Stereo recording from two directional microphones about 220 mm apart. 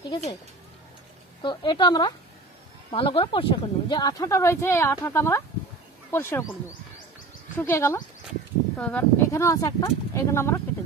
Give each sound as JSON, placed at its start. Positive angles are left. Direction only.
{"t": 1.4, "sound": "speech", "side_deg": 20}
{"t": 7.5, "sound": "speech", "side_deg": 10}